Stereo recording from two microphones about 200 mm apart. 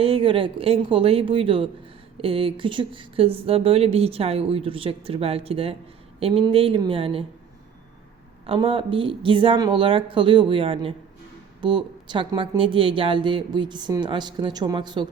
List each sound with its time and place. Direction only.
0.0 s speech: 25° right (ahead or behind)
8.4 s speech: 25° right (ahead or behind)